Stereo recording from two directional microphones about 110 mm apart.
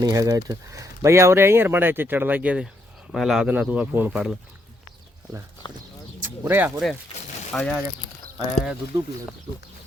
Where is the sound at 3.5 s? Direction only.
10° right (ahead or behind).